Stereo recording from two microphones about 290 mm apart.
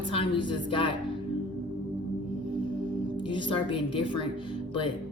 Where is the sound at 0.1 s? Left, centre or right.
Centre.